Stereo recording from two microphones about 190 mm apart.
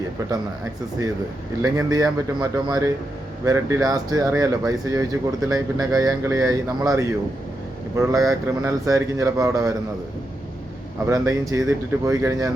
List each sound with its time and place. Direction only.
1.6 s speech: 20° right (ahead or behind)
11.0 s speech: 15° right (ahead or behind)